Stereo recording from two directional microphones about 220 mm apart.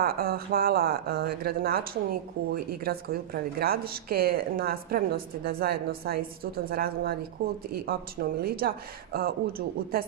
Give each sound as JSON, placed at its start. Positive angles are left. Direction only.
{"t": 0.0, "sound": "speech", "side_deg": -45}